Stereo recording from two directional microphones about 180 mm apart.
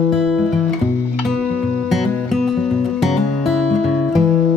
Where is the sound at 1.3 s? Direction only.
5° left (ahead or behind).